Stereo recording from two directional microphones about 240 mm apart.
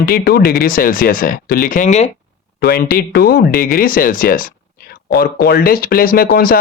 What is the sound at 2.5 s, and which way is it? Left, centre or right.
Speech, left.